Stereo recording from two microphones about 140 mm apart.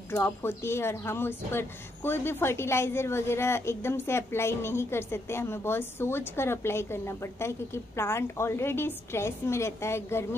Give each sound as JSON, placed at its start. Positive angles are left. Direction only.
{"t": 0.1, "sound": "a woman's voice", "side_deg": 15}